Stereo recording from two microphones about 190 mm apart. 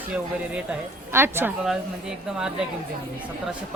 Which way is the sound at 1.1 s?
10° right (ahead or behind).